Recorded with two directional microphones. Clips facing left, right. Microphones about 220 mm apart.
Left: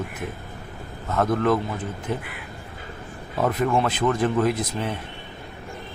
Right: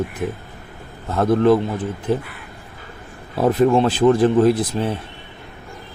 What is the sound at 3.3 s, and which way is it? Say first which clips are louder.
Speech: right 7 dB; 30° right (ahead or behind).